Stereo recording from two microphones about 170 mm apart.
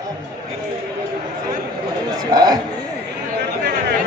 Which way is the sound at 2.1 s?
25° right (ahead or behind).